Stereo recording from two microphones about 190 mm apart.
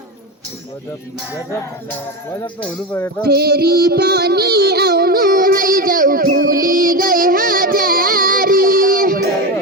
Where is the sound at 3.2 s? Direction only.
55° right (ahead or behind).